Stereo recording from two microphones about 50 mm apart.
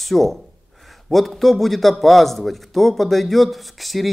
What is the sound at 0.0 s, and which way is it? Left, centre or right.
A man's voice, centre.